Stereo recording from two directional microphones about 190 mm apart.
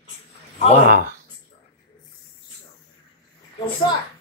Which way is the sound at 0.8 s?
50° right (ahead or behind).